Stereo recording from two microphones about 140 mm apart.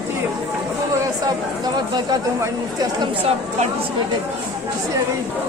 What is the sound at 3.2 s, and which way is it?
Speech, 45° right (ahead or behind).